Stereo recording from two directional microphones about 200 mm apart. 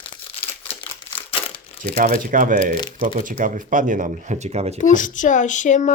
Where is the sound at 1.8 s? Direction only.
45° right (ahead or behind).